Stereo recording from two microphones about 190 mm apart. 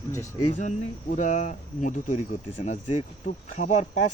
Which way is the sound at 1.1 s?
40° left (ahead or behind).